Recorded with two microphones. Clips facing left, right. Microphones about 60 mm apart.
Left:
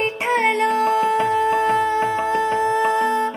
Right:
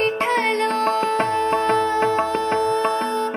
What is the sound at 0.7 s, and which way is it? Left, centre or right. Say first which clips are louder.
Music: left 2 dB; right.